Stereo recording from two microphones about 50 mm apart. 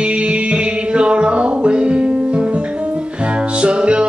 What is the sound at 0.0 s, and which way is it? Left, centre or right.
Music, right.